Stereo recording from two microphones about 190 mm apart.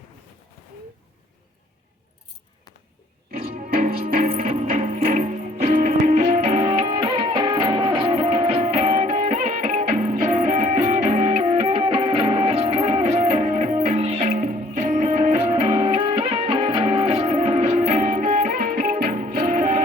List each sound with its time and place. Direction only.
3.3 s music: 50° right (ahead or behind)